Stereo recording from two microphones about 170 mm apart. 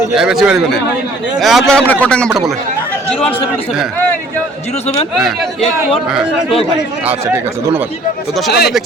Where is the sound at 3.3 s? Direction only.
35° left (ahead or behind).